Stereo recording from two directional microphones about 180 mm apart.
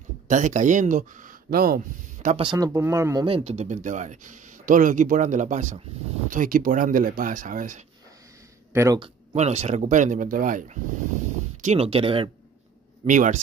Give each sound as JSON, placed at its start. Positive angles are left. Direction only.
{"t": 0.3, "sound": "speech", "side_deg": -45}
{"t": 2.3, "sound": "speech", "side_deg": -25}
{"t": 3.3, "sound": "speech", "side_deg": -35}
{"t": 8.7, "sound": "speech", "side_deg": -15}
{"t": 9.3, "sound": "speech", "side_deg": -40}
{"t": 13.0, "sound": "speech", "side_deg": -45}